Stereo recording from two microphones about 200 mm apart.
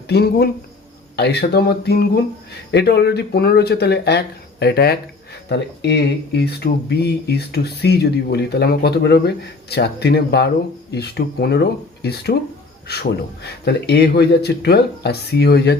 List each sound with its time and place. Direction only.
0.1 s speech: 50° left (ahead or behind)
6.3 s speech: 55° left (ahead or behind)